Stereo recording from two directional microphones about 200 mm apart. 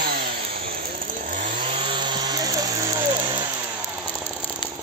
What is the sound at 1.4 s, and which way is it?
Chainsaw, 25° right (ahead or behind).